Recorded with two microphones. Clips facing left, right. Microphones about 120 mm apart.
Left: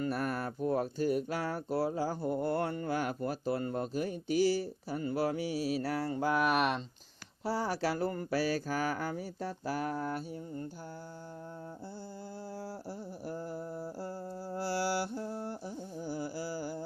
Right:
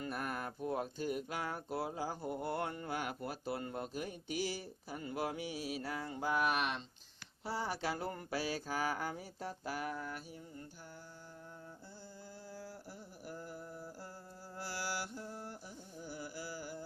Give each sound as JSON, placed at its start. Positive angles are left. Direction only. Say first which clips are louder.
{"t": 0.0, "sound": "speech", "louder": "left 7 dB", "side_deg": 40}
{"t": 5.8, "sound": "mantra", "louder": "left 7 dB", "side_deg": 75}
{"t": 7.4, "sound": "speech", "louder": "left 6 dB", "side_deg": 40}
{"t": 8.1, "sound": "mantra", "louder": "left 7 dB", "side_deg": 45}
{"t": 9.6, "sound": "speech", "louder": "left 7 dB", "side_deg": 40}
{"t": 13.2, "sound": "mantra", "louder": "left 7 dB", "side_deg": 30}